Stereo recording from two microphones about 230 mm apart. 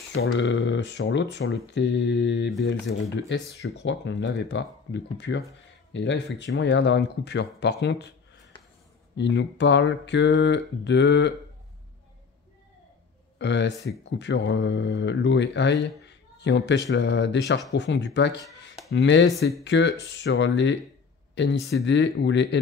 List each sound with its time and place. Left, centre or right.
0.1 s speech: left
9.1 s speech: left
13.4 s speech: left